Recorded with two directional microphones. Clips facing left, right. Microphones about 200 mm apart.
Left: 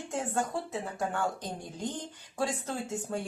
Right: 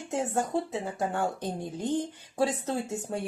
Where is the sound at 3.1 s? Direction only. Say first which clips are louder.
Right 1 dB; 25° right (ahead or behind).